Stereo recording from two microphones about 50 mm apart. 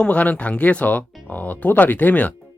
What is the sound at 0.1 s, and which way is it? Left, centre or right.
Speech, left.